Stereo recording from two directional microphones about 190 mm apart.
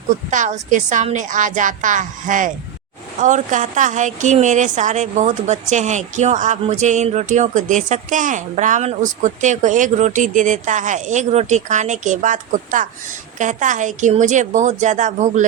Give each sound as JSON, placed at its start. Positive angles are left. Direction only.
{"t": 0.3, "sound": "a woman's voice", "side_deg": -40}